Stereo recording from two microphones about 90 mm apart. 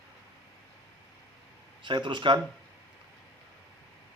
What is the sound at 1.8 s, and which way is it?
Speech, 60° right (ahead or behind).